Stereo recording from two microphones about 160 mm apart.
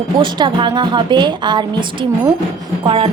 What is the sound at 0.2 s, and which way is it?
A woman's voice, 30° right (ahead or behind).